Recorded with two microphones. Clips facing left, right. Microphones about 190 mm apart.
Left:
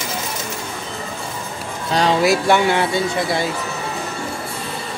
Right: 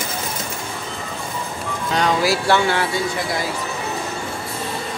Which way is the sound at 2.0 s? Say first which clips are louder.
Left 3 dB; 25° left (ahead or behind).